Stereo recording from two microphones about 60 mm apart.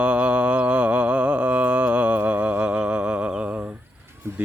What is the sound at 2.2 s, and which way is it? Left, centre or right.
Humming, right.